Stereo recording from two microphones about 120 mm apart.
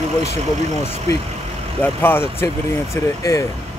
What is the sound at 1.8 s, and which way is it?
Speech, 20° left (ahead or behind).